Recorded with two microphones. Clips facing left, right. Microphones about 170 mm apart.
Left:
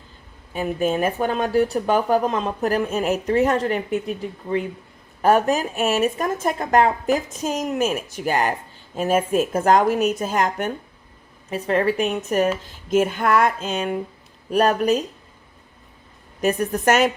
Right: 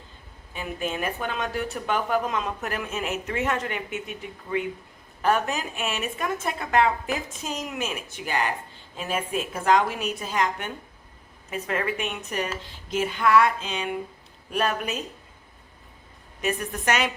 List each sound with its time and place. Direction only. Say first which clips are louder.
0.5 s speech: left 9 dB; 40° left (ahead or behind)
11.5 s speech: left 8 dB; 35° left (ahead or behind)
16.4 s speech: left 8 dB; 40° left (ahead or behind)